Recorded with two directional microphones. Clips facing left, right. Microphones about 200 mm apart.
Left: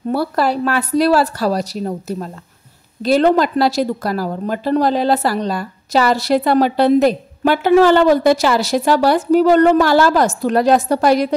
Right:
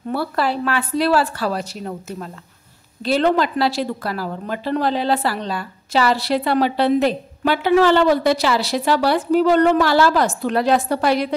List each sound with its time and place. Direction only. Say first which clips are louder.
0.1 s a woman's voice: left 4 dB; 40° left (ahead or behind)